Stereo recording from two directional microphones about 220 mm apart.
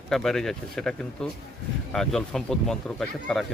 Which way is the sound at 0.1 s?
Centre (ahead or behind).